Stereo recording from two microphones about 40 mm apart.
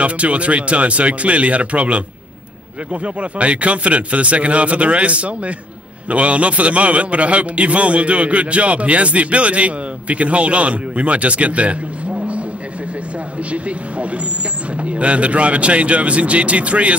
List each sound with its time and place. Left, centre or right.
0.0 s a man's voice: right
13.5 s a man's voice: right